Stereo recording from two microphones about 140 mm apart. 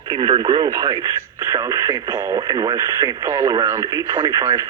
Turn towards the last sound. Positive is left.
turn(degrees=-25)  # may be behind; listen again after turning